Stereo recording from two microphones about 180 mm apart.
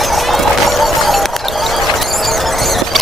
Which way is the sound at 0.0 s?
Centre (ahead or behind).